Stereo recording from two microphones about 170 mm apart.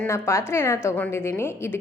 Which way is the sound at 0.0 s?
15° left (ahead or behind).